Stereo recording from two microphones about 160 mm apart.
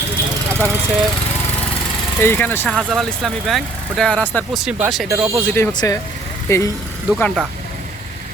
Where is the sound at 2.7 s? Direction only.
Centre (ahead or behind).